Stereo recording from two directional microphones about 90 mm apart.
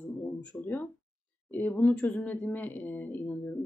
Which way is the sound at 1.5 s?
20° left (ahead or behind).